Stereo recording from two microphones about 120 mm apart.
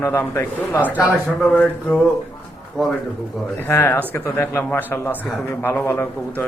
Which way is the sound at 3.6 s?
15° left (ahead or behind).